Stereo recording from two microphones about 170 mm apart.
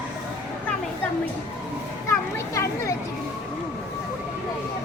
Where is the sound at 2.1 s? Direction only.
20° left (ahead or behind).